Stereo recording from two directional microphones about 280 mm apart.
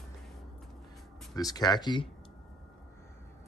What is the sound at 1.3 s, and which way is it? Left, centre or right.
Speech, centre.